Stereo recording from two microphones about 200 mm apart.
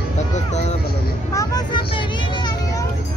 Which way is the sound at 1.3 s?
20° left (ahead or behind).